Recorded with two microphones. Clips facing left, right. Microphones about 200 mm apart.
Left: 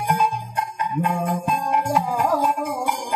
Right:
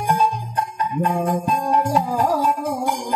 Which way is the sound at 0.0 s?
35° right (ahead or behind).